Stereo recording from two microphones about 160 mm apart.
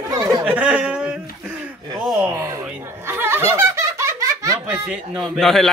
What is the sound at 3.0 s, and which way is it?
Laughter, 15° right (ahead or behind).